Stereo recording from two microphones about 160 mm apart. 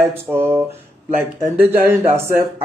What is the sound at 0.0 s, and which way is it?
A man's voice, 15° right (ahead or behind).